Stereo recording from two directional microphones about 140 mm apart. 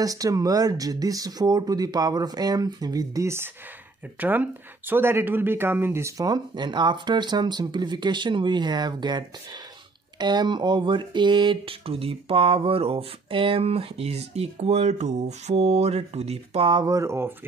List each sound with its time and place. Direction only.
0.0 s speech: 25° right (ahead or behind); by 16.8 s 40° right (ahead or behind)
16.8 s speech: 25° right (ahead or behind)